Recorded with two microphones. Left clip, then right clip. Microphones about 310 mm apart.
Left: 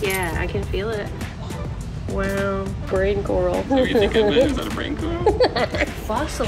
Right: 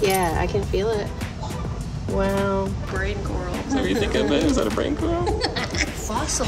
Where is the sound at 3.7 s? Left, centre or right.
Centre.